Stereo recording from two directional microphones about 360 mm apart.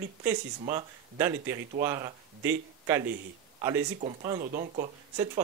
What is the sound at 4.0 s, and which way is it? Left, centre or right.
Speech, centre.